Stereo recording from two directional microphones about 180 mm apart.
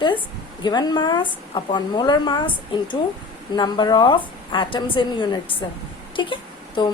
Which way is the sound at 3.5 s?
25° left (ahead or behind).